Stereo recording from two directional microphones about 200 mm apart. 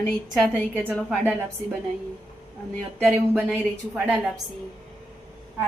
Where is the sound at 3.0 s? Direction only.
5° right (ahead or behind).